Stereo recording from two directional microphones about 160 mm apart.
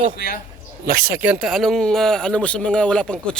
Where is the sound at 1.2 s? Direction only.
5° right (ahead or behind).